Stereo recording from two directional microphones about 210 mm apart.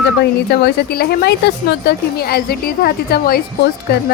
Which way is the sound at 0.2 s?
50° left (ahead or behind).